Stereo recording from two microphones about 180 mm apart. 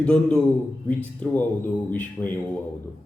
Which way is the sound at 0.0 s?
5° left (ahead or behind).